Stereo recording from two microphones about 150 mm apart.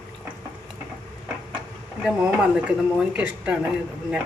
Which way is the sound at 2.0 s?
5° right (ahead or behind).